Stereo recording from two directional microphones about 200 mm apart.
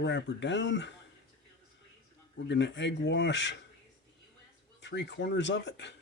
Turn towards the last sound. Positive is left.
turn(degrees=60)  # may be behind; listen again after turning